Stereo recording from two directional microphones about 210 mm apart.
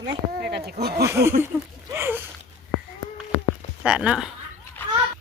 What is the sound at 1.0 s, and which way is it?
Speech, 10° right (ahead or behind).